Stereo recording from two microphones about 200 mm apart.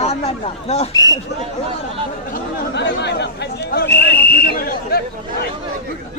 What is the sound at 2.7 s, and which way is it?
Speech, 60° left (ahead or behind).